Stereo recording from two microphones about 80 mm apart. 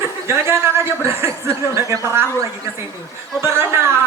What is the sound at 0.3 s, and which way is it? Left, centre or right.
Speech, right.